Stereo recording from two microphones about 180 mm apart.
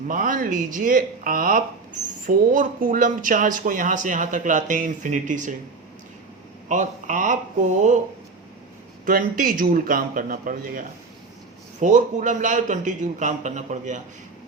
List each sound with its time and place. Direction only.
0.1 s speech: 50° right (ahead or behind)
6.7 s speech: 45° right (ahead or behind)
9.0 s speech: 50° right (ahead or behind)